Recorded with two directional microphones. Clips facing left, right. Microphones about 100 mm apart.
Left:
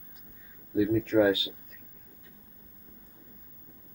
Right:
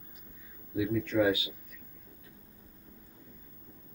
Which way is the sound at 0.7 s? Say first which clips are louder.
Left 5 dB; 40° left (ahead or behind).